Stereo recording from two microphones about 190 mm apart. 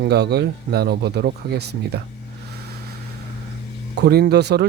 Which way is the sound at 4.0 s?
60° right (ahead or behind).